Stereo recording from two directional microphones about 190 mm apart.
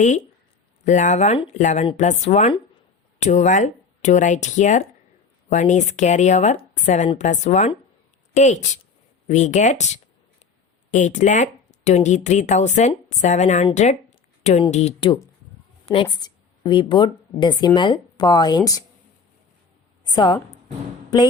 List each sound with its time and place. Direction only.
0.9 s a woman's voice: 40° left (ahead or behind); by 18.8 s 20° left (ahead or behind)
20.1 s speech: 20° left (ahead or behind)